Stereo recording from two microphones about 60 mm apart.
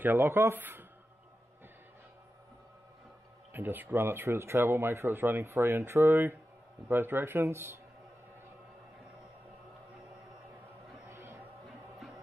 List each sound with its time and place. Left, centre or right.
0.0 s speech: right
3.5 s speech: right
6.9 s speech: right
11.1 s a sound: right
11.6 s music: centre